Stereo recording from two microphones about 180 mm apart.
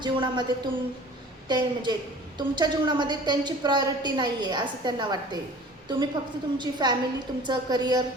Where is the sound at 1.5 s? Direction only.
25° right (ahead or behind).